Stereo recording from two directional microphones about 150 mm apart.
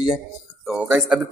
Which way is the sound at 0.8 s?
10° right (ahead or behind).